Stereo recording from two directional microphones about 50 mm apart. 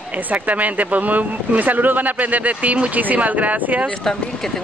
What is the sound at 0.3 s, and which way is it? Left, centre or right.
Speech, right.